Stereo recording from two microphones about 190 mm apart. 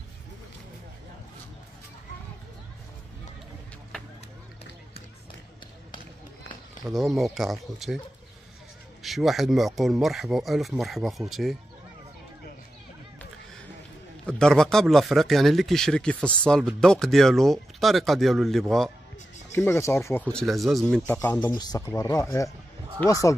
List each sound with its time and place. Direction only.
6.9 s speech: centre (ahead or behind)
9.0 s speech: centre (ahead or behind)
14.2 s speech: 5° left (ahead or behind)
19.5 s speech: 15° left (ahead or behind)
21.4 s speech: 20° left (ahead or behind)